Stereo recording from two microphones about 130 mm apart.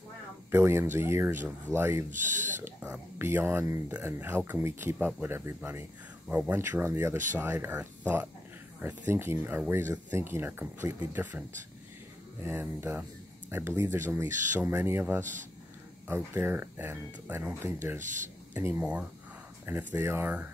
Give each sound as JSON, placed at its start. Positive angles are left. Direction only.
{"t": 0.5, "sound": "speech", "side_deg": -20}
{"t": 2.0, "sound": "speech", "side_deg": -75}
{"t": 2.6, "sound": "speech", "side_deg": -15}
{"t": 18.0, "sound": "speech", "side_deg": -75}
{"t": 18.5, "sound": "speech", "side_deg": -15}